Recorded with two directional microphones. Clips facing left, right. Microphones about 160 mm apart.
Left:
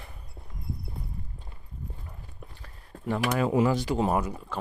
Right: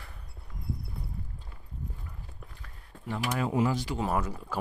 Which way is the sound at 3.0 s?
65° left (ahead or behind).